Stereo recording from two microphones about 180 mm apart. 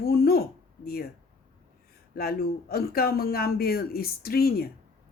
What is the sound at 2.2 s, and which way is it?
Speech, 55° left (ahead or behind).